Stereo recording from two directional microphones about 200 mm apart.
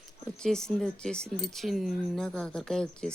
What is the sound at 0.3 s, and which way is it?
Speech, 5° left (ahead or behind).